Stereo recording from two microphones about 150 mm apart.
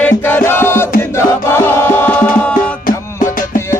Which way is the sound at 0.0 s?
15° left (ahead or behind).